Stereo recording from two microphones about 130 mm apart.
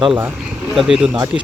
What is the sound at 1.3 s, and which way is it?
Speech, 45° left (ahead or behind).